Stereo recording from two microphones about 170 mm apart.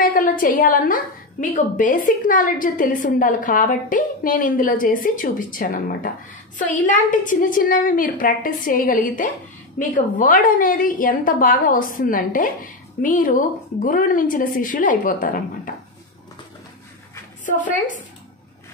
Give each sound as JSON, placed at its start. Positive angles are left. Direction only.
{"t": 0.0, "sound": "a woman's voice", "side_deg": 55}
{"t": 17.5, "sound": "a woman's voice", "side_deg": 50}